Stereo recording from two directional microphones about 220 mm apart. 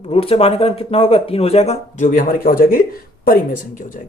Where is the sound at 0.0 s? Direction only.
25° left (ahead or behind).